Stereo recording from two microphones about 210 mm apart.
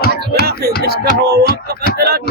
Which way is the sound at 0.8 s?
50° right (ahead or behind).